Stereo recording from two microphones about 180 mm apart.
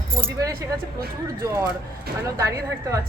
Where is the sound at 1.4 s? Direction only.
15° right (ahead or behind).